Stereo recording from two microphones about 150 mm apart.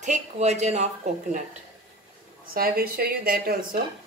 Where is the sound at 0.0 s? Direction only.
50° right (ahead or behind).